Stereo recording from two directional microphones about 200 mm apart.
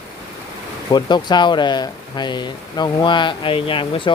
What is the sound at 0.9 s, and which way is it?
Speech, 20° left (ahead or behind).